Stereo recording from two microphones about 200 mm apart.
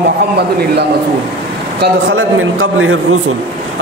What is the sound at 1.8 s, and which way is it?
A man's voice, 80° right.